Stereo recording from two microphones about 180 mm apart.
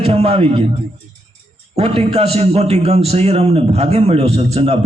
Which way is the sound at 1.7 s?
35° right (ahead or behind).